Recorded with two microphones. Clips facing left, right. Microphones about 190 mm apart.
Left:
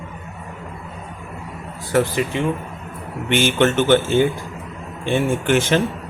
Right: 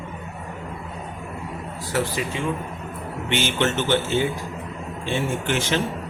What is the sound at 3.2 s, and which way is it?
Speech, 50° left (ahead or behind).